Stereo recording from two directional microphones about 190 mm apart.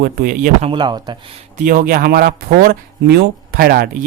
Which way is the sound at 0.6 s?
25° right (ahead or behind).